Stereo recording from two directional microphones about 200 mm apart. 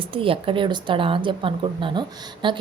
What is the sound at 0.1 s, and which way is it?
A woman's voice, 25° right (ahead or behind).